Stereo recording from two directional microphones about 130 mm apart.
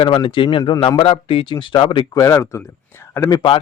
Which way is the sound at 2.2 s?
25° left (ahead or behind).